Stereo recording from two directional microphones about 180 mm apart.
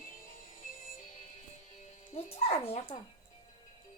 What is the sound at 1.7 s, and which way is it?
Speech, 35° left (ahead or behind).